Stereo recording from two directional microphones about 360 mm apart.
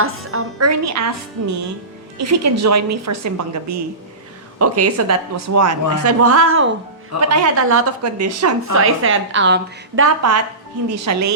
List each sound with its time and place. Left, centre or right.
0.0 s music: right
2.1 s a woman's voice: right